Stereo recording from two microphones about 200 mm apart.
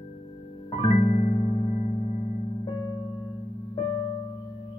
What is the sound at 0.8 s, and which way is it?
Music, 30° left (ahead or behind).